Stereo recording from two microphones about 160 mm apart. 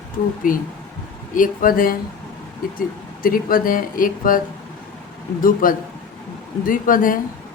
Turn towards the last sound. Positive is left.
turn(degrees=60)  # may be behind; listen again after turning